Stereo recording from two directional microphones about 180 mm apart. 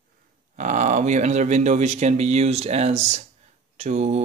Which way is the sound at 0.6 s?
40° right (ahead or behind).